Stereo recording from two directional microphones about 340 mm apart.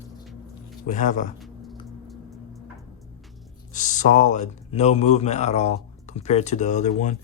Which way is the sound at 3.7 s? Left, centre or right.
Left.